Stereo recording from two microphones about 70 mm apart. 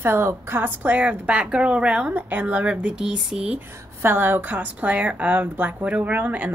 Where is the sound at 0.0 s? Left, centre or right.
Right; by 3.5 s centre.